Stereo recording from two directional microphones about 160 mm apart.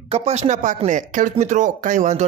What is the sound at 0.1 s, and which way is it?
Speech, 40° right (ahead or behind).